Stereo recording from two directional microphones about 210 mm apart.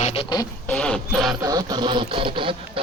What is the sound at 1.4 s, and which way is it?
Radio, 20° right (ahead or behind).